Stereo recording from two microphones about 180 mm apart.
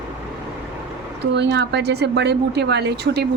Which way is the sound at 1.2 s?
70° right (ahead or behind).